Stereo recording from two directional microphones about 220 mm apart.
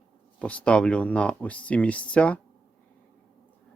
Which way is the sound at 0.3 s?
5° left (ahead or behind).